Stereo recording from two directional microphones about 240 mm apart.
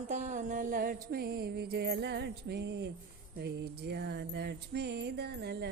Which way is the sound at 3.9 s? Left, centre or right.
Right.